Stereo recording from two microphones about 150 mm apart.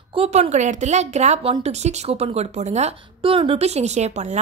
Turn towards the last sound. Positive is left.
turn(degrees=-50)  # may be behind; listen again after turning